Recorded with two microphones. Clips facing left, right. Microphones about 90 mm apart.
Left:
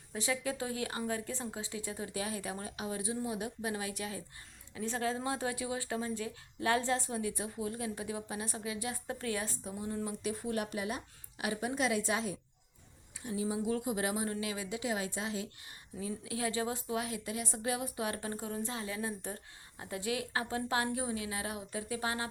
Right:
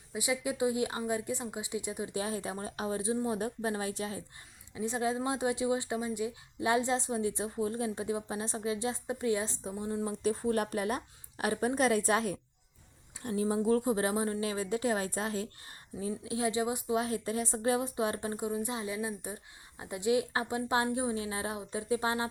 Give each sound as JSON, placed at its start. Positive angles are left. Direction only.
{"t": 0.1, "sound": "a woman's voice", "side_deg": -15}
{"t": 4.7, "sound": "speech", "side_deg": -20}
{"t": 10.2, "sound": "a woman's voice", "side_deg": -35}
{"t": 17.1, "sound": "speech", "side_deg": -35}